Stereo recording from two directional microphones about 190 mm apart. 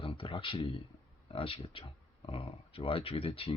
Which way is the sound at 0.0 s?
25° left (ahead or behind).